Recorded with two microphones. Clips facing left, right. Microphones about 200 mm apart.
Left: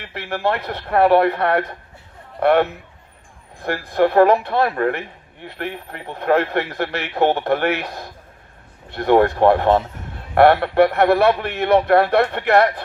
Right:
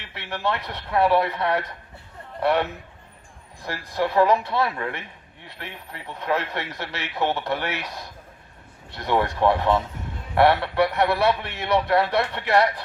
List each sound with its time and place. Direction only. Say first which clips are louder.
0.0 s a man's voice: left 6 dB; 55° left (ahead or behind)